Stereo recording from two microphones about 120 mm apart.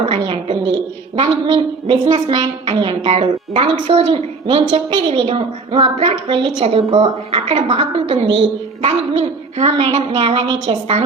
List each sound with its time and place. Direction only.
0.0 s a woman's voice: 45° right (ahead or behind); by 9.6 s 60° right (ahead or behind)
9.6 s a woman's voice: 45° right (ahead or behind)